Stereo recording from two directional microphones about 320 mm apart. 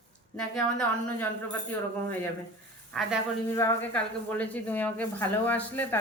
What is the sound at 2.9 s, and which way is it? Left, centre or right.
Speech, centre.